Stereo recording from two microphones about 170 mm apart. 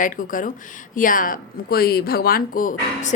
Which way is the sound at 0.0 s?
55° left (ahead or behind).